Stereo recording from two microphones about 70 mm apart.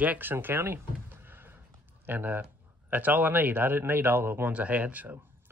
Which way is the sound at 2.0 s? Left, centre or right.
Right.